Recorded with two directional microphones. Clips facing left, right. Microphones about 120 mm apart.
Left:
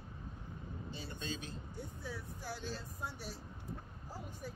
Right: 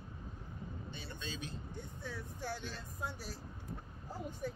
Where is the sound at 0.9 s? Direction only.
40° left (ahead or behind).